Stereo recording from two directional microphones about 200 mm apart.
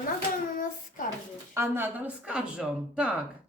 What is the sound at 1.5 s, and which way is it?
Speech, 10° right (ahead or behind).